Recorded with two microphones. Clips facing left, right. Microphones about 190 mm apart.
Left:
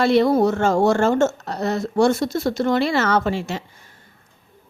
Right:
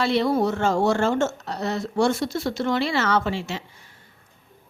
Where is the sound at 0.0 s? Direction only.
50° left (ahead or behind).